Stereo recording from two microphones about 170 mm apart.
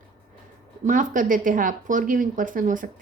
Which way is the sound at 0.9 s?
50° right (ahead or behind).